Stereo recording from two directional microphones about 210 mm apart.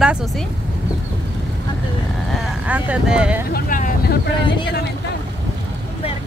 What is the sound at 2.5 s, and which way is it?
Speech, 5° right (ahead or behind).